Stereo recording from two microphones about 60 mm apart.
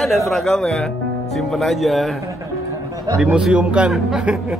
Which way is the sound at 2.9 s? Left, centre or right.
Right.